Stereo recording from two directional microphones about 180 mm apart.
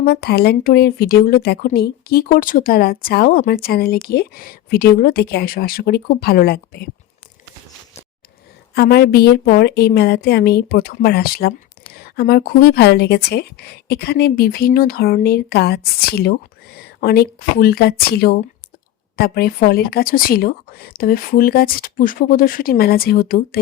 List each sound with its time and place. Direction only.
0.0 s a woman's voice: 60° left (ahead or behind)
8.7 s a woman's voice: 65° left (ahead or behind)